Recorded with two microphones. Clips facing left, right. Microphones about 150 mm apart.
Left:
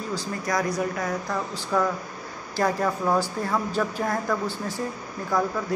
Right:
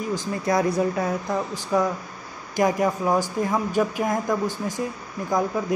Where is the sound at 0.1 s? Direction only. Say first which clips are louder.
Right 4 dB; 20° right (ahead or behind).